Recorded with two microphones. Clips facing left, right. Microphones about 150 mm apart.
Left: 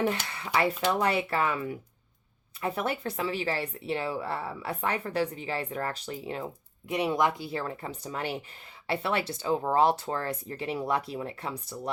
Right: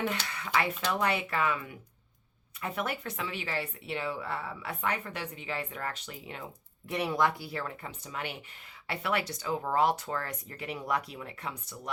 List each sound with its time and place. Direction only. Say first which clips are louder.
0.0 s speech: left 4 dB; 30° left (ahead or behind)
6.8 s speech: left 2 dB; 20° left (ahead or behind)